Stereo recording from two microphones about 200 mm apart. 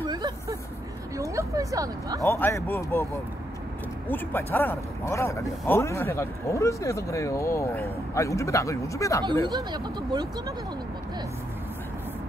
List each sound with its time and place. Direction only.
0.0 s vehicle: 20° right (ahead or behind)
1.1 s a sound: 15° right (ahead or behind)
2.2 s speech: 10° left (ahead or behind)
4.1 s speech: 10° left (ahead or behind)
9.5 s speech: 20° right (ahead or behind)